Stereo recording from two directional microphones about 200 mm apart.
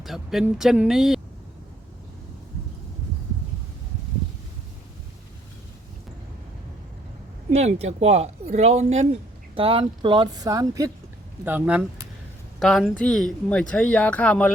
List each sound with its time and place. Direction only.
0.0 s speech: centre (ahead or behind)
7.5 s speech: 35° right (ahead or behind); by 14.5 s 5° left (ahead or behind)